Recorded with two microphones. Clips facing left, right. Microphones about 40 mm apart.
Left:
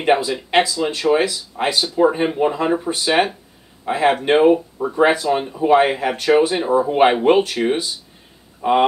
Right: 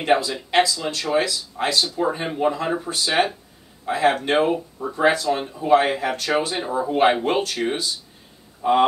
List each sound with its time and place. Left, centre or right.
0.0 s speech: centre
4.7 s speech: left